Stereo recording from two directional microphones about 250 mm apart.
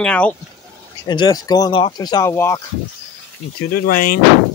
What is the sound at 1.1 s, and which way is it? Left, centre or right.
Speech, centre.